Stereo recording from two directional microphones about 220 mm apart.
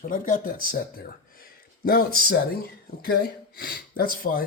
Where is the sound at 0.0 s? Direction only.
40° left (ahead or behind).